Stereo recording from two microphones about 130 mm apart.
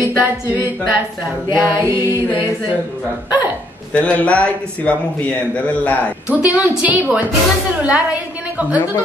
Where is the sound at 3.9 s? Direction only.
10° left (ahead or behind).